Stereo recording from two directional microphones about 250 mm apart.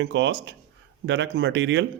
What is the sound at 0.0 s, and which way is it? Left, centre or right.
Speech, right.